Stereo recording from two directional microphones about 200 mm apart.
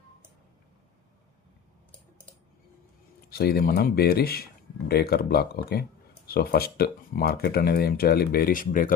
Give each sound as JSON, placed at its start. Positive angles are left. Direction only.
{"t": 3.2, "sound": "speech", "side_deg": 50}